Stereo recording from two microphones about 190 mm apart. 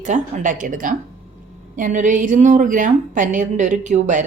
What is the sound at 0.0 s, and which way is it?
A woman's voice, 40° right (ahead or behind).